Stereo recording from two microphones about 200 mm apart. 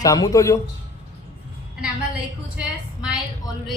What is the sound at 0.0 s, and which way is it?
Speech, 15° left (ahead or behind).